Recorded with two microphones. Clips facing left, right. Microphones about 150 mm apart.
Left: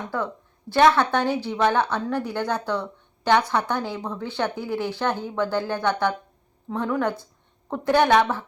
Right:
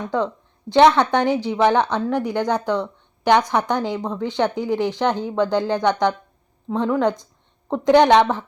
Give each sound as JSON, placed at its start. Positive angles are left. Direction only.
{"t": 0.1, "sound": "a woman's voice", "side_deg": -20}